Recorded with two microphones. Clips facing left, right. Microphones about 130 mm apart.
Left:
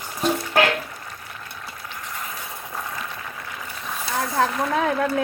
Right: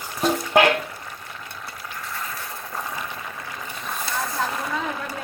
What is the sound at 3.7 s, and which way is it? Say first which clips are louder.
Boat: right 1 dB; 5° left (ahead or behind).